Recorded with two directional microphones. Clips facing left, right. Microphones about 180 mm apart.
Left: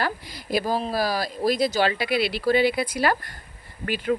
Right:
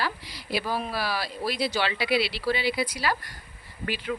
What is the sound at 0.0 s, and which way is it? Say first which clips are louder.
Speech: left 4 dB; 50° left (ahead or behind).